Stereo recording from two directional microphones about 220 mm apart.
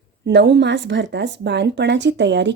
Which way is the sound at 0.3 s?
50° right (ahead or behind).